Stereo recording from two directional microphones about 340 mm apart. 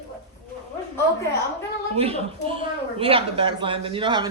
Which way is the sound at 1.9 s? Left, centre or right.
Centre.